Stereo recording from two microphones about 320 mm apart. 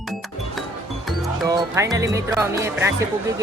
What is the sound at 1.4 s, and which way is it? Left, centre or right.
Speech, centre.